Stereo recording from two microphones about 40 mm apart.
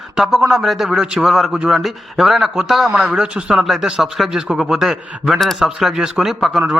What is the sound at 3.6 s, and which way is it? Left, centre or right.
A man's voice, centre.